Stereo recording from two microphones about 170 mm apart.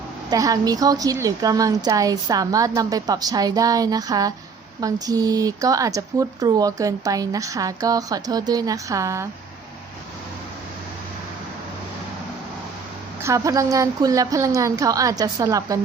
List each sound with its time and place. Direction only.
0.3 s speech: 20° right (ahead or behind)
13.2 s speech: 20° right (ahead or behind)